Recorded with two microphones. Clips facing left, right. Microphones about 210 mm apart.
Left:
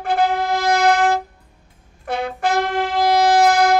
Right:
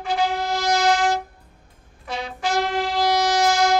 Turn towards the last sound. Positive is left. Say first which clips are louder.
# left 5 dB
turn(degrees=55)  # may be behind; listen again after turning